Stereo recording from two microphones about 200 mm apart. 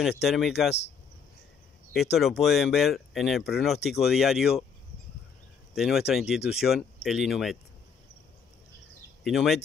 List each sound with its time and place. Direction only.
0.2 s speech: centre (ahead or behind)
2.1 s speech: centre (ahead or behind)
5.8 s speech: centre (ahead or behind)
9.2 s speech: centre (ahead or behind)